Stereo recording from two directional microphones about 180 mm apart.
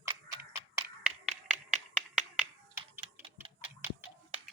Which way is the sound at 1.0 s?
5° right (ahead or behind).